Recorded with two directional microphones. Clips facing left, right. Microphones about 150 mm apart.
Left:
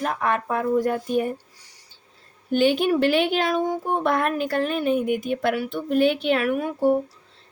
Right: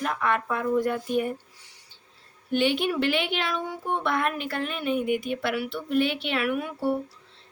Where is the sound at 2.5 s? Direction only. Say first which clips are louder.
Left 5 dB; 45° left (ahead or behind).